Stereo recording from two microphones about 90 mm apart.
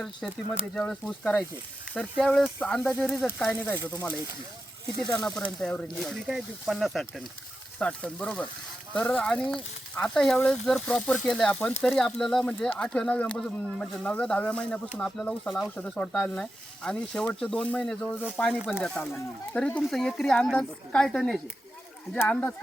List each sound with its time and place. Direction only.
0.7 s speech: 10° left (ahead or behind)
5.1 s speech: 10° left (ahead or behind)
7.8 s speech: 15° left (ahead or behind)
15.2 s speech: centre (ahead or behind)
15.7 s speech: 15° left (ahead or behind)
22.3 s speech: 15° left (ahead or behind)